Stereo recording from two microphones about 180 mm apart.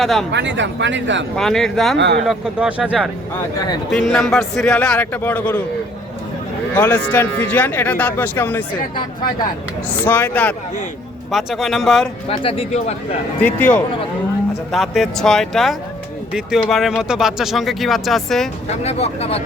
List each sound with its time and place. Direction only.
0.0 s a man's voice: centre (ahead or behind)
0.3 s speech: 80° right
1.4 s a man's voice: centre (ahead or behind)
6.7 s speech: 10° left (ahead or behind)
10.1 s speech: 10° left (ahead or behind)
11.3 s a man's voice: centre (ahead or behind)
12.3 s speech: 30° left (ahead or behind)
13.4 s speech: 10° left (ahead or behind)
14.7 s a man's voice: centre (ahead or behind)
18.8 s speech: 35° left (ahead or behind)